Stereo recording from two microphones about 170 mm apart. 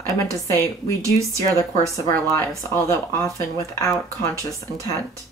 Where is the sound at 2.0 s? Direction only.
15° left (ahead or behind).